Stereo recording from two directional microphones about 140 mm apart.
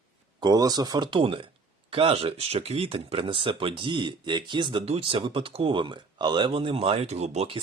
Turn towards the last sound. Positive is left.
turn(degrees=-50)  # may be behind; listen again after turning